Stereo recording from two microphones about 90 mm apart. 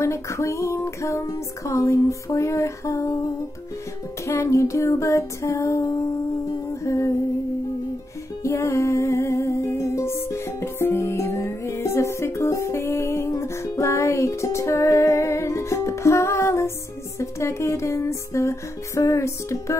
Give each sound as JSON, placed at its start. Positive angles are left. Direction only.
{"t": 0.0, "sound": "music", "side_deg": 35}
{"t": 4.3, "sound": "music", "side_deg": 35}
{"t": 8.5, "sound": "music", "side_deg": 35}